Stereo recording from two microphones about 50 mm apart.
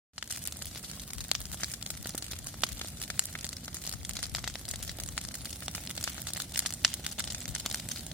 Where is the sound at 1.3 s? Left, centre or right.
Right.